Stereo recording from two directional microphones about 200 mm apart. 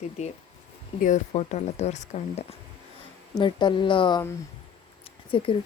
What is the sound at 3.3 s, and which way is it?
Speech, 25° left (ahead or behind).